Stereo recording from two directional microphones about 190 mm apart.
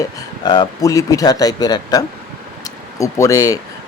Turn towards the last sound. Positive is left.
turn(degrees=15)  # may be behind; listen again after turning